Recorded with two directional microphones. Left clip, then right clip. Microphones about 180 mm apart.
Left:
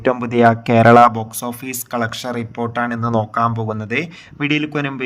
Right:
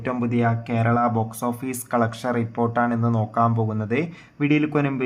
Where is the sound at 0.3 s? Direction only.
85° left; by 1.1 s 65° left (ahead or behind).